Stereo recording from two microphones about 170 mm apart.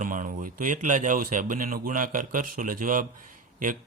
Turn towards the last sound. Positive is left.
turn(degrees=-50)  # may be behind; listen again after turning